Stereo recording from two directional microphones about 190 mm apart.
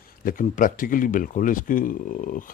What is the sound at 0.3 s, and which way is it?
A man's voice, 45° left (ahead or behind).